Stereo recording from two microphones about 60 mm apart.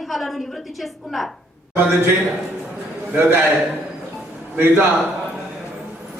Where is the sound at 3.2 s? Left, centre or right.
Right.